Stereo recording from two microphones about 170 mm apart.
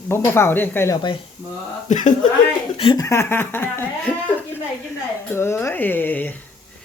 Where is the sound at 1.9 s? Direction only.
45° left (ahead or behind).